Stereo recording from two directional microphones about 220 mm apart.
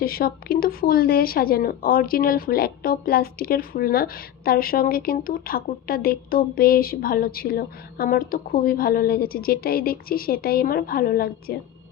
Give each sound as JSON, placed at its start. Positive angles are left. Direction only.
{"t": 0.0, "sound": "speech", "side_deg": 45}